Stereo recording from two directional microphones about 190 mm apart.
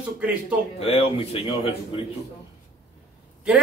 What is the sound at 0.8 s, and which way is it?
Speech, 30° left (ahead or behind).